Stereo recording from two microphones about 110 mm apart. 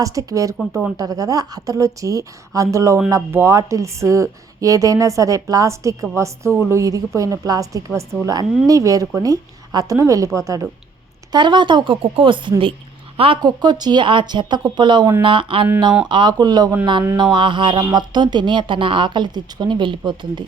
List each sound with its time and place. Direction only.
0.0 s a woman's voice: 30° right (ahead or behind)
11.3 s a woman's voice: 45° right (ahead or behind)
13.4 s a woman's voice: 40° right (ahead or behind)